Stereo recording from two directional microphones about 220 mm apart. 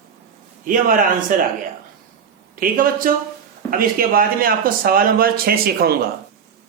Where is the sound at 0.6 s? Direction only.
40° right (ahead or behind).